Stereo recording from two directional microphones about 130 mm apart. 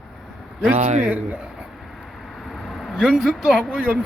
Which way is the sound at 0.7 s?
60° right (ahead or behind).